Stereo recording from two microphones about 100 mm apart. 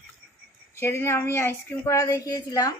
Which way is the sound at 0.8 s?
25° left (ahead or behind).